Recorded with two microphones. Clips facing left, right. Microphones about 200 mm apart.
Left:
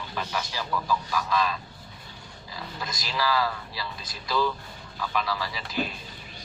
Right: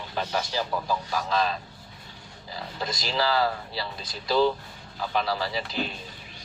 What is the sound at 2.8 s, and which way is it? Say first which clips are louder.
Speech: right 3 dB; 30° right (ahead or behind).